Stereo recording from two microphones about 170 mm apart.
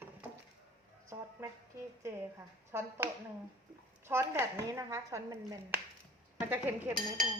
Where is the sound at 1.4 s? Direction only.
15° right (ahead or behind).